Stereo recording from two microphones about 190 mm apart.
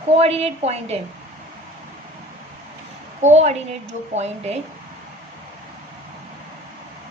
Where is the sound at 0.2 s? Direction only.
35° right (ahead or behind).